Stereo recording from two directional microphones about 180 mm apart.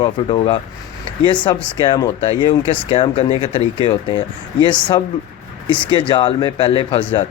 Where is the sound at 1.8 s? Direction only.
25° left (ahead or behind).